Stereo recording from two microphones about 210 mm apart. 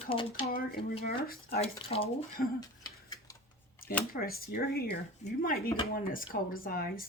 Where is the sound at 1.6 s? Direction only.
30° left (ahead or behind).